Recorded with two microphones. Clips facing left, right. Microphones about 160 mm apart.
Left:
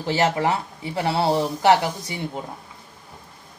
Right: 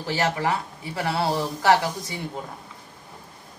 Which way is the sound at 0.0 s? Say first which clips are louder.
Left 4 dB; 25° left (ahead or behind).